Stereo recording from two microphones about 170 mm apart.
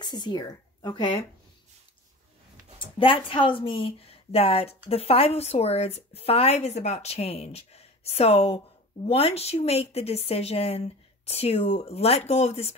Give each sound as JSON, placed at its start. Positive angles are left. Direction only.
{"t": 0.0, "sound": "speech", "side_deg": 25}
{"t": 3.0, "sound": "a woman's voice", "side_deg": 30}